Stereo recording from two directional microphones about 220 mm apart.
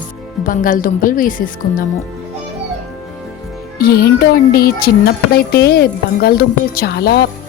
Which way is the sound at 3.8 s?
45° left (ahead or behind).